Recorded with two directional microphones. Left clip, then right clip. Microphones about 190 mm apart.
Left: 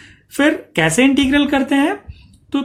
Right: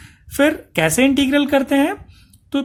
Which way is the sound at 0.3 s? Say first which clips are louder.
Left 1 dB; 35° right (ahead or behind).